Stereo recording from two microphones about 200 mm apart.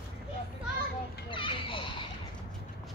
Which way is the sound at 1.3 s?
25° left (ahead or behind).